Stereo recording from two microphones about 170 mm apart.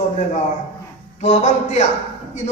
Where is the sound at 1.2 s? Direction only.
45° left (ahead or behind).